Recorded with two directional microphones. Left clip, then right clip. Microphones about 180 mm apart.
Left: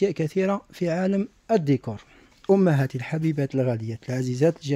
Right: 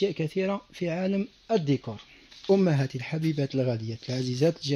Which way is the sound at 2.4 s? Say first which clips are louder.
Left 3 dB; 25° left (ahead or behind).